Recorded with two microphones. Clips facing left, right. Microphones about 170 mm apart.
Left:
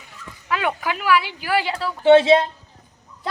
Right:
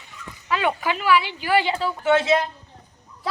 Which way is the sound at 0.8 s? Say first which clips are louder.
Even; 10° left (ahead or behind).